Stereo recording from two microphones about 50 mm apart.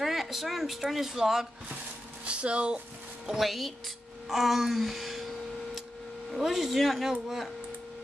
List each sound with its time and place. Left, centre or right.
0.0 s speech: centre
2.2 s speech: right
3.3 s speech: centre
6.3 s speech: centre